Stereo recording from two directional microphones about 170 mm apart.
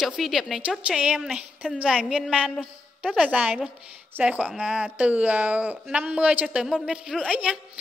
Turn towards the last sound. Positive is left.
turn(degrees=-5)  # may be behind; listen again after turning